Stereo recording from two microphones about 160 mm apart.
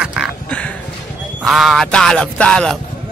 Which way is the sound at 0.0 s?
5° right (ahead or behind).